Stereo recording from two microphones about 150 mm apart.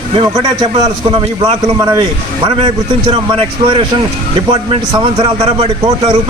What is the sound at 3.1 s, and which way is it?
A man's voice, 35° right (ahead or behind).